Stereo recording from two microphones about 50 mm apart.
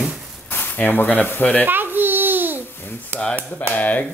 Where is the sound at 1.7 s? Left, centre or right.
Right.